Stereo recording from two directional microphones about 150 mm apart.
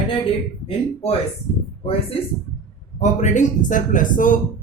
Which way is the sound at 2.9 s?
55° left (ahead or behind).